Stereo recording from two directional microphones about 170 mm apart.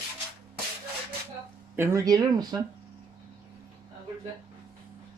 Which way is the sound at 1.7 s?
15° right (ahead or behind).